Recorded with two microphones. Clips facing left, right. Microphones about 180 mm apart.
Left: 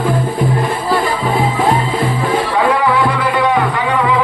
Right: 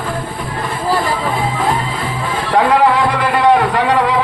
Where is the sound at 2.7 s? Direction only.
65° right (ahead or behind).